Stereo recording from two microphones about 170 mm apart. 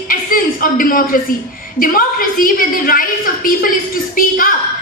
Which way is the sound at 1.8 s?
55° left (ahead or behind).